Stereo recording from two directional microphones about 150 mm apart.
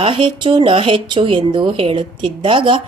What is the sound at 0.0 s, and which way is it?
A woman's voice, 35° right (ahead or behind).